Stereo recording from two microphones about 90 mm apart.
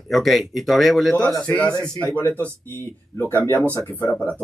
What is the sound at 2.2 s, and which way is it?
Speech, 25° left (ahead or behind).